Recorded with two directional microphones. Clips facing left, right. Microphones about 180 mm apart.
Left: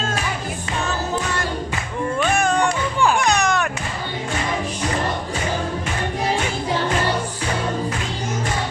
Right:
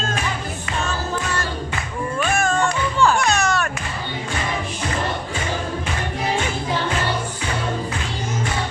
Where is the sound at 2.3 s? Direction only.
15° left (ahead or behind).